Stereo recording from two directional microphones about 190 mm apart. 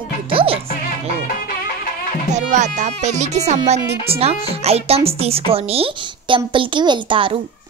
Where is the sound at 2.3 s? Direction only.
35° right (ahead or behind).